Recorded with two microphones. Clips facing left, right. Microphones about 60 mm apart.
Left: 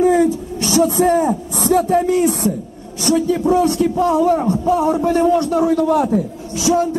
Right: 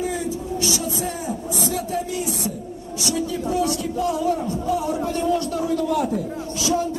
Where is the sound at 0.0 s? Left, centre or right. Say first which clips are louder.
Left 12 dB; left.